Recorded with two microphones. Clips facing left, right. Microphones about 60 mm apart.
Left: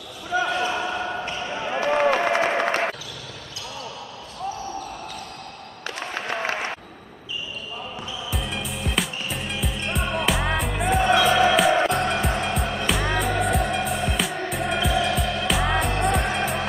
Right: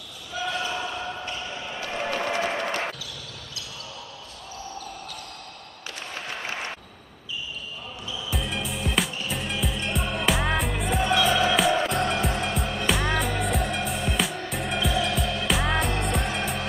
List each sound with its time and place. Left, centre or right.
0.3 s basketball bounce: left
5.9 s applause: left
8.3 s music: centre